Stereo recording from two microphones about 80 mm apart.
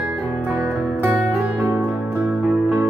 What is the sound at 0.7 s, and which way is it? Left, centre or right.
Music, centre.